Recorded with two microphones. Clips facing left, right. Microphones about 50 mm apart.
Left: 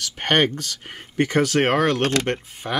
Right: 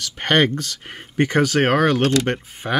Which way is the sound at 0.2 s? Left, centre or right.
Right.